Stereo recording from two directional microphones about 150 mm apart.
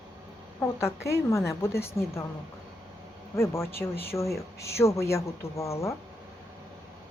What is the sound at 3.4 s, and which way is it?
A woman's voice, 15° left (ahead or behind).